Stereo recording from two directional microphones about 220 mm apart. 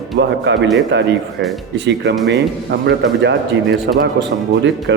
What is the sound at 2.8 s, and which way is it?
Speech, 50° right (ahead or behind).